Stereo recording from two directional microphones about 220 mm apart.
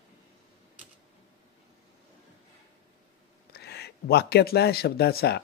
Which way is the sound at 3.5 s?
45° left (ahead or behind).